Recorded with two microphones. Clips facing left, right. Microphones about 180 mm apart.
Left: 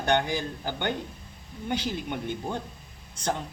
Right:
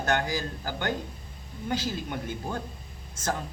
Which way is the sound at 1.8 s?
20° left (ahead or behind).